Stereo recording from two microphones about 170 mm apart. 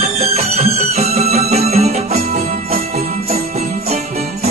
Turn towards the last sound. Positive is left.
turn(degrees=-40)  # may be behind; listen again after turning